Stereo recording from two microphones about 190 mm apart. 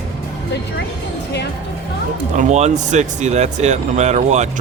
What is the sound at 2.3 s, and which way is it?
Speech, 40° right (ahead or behind).